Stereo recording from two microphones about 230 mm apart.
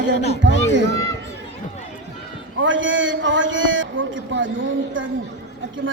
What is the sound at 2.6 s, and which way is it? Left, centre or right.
A man's voice, right.